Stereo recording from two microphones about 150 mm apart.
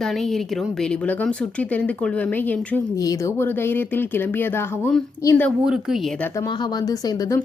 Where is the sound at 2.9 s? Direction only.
25° left (ahead or behind).